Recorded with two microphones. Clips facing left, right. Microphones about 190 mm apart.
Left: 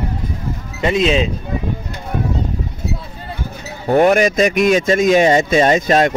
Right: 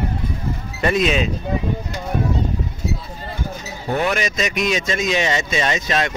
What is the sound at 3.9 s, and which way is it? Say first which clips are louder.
A man's voice: left 9 dB; 50° left (ahead or behind).